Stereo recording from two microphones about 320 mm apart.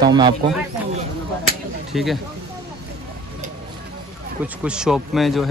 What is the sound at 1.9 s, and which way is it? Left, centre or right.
Speech, centre.